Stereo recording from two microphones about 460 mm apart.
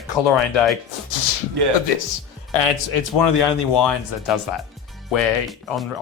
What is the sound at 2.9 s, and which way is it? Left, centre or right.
Speech, left.